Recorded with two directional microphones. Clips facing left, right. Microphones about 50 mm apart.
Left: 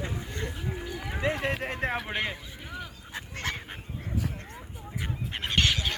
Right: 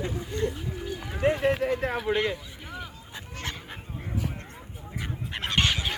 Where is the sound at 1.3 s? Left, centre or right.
Left.